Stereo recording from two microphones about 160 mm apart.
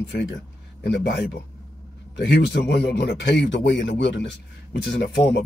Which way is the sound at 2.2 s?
90° left.